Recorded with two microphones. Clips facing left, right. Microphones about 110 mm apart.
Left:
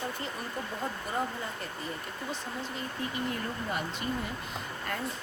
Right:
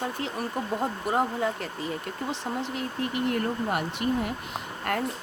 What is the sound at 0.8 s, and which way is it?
Speech, 70° right (ahead or behind).